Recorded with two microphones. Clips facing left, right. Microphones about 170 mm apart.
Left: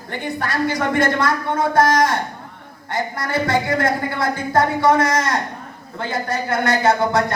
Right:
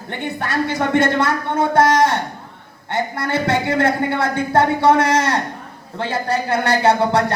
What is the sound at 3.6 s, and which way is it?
A man's voice, 25° right (ahead or behind).